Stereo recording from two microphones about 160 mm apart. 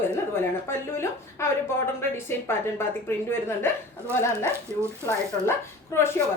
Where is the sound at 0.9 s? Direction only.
15° left (ahead or behind).